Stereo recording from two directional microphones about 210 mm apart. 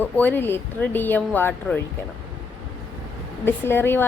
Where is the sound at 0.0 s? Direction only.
10° left (ahead or behind).